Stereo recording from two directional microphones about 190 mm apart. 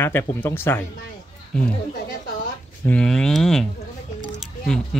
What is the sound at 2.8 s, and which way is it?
Speech, 5° left (ahead or behind).